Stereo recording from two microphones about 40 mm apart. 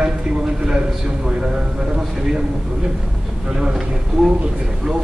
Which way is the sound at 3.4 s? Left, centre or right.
Centre.